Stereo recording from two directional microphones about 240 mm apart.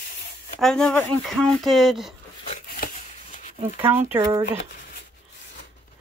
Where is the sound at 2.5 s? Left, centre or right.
Left.